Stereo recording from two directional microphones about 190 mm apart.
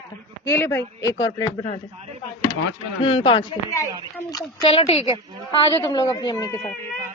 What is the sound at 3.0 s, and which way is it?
A woman's voice, 30° left (ahead or behind).